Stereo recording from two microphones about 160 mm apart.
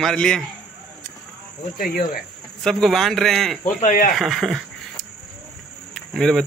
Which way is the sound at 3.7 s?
55° left (ahead or behind).